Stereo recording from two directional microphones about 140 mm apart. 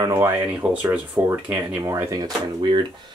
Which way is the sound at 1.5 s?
20° right (ahead or behind).